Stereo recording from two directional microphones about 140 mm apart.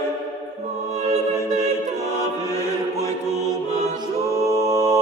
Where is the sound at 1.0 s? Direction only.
55° right (ahead or behind).